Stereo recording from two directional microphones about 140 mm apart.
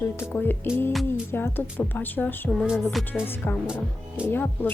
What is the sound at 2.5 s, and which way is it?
Music, centre (ahead or behind).